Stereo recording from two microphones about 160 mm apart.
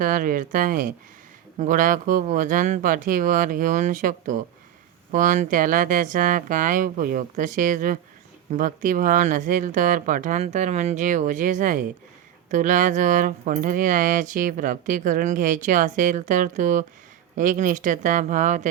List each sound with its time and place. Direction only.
0.0 s speech: 60° right (ahead or behind)